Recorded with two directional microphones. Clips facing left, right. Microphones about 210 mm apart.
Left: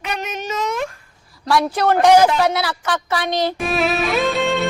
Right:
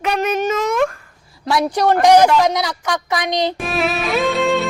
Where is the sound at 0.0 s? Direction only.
50° right (ahead or behind).